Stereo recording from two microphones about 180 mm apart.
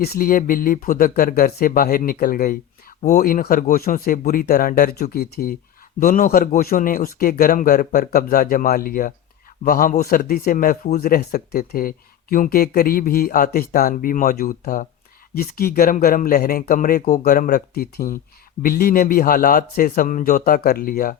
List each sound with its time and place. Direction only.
0.0 s a man's voice: 55° left (ahead or behind)